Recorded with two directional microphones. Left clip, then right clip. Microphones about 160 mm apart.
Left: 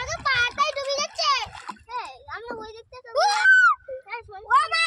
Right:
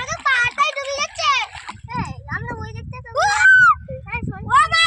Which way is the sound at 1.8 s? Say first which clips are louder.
Right 6 dB; 20° left (ahead or behind).